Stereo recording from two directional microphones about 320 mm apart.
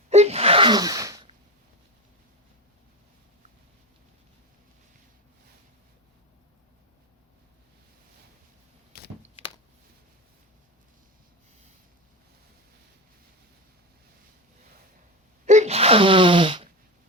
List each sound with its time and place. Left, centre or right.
0.1 s gasp: centre
8.9 s a sound: left
15.4 s sneeze: right